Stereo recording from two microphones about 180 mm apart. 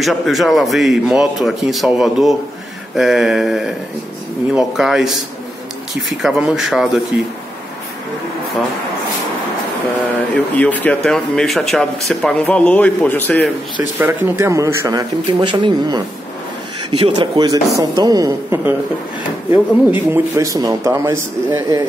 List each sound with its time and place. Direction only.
0.0 s speech: centre (ahead or behind)
10.3 s speech: 10° left (ahead or behind)
13.9 s a man's voice: 10° right (ahead or behind)